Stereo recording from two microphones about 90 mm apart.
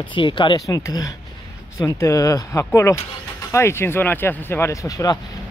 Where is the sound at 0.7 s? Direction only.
40° left (ahead or behind).